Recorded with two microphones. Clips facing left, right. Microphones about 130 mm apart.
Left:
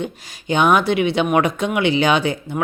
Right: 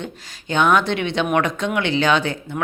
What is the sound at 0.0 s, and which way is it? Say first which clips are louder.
Speech: left 5 dB; 10° left (ahead or behind).